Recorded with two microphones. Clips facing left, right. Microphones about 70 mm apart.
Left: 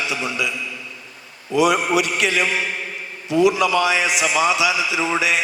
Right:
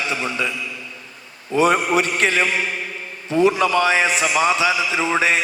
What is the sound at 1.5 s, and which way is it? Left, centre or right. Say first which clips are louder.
A man's voice: even; right.